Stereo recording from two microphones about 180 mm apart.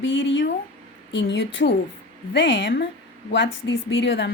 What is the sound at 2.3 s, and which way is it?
Speech, 75° left (ahead or behind).